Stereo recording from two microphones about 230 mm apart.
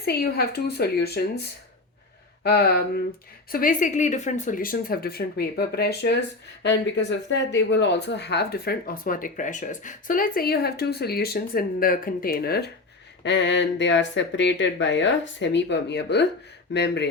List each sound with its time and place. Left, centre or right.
0.0 s speech: left